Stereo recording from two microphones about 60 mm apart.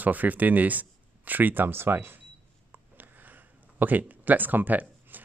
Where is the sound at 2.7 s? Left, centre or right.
Right.